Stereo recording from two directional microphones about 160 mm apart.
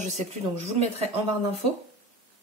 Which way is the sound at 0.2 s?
50° right (ahead or behind).